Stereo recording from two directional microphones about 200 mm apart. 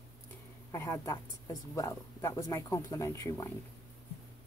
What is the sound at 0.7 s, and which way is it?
A woman's voice, 15° left (ahead or behind).